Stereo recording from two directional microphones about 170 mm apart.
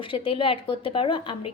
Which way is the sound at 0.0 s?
30° left (ahead or behind).